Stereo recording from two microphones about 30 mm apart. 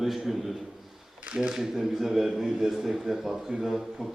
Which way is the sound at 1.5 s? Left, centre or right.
Centre.